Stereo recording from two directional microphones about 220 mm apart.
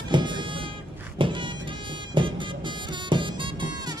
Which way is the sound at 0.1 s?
20° right (ahead or behind).